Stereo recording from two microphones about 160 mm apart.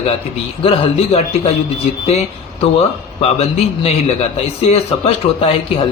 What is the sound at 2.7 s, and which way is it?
Speech, 40° left (ahead or behind).